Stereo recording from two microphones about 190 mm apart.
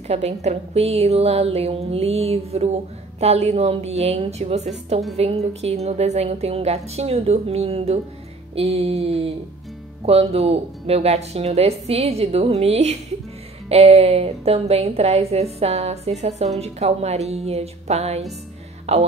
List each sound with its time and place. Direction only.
0.1 s speech: 35° right (ahead or behind)